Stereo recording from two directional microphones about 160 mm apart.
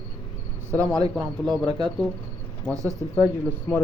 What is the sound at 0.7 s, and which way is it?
Speech, 20° right (ahead or behind).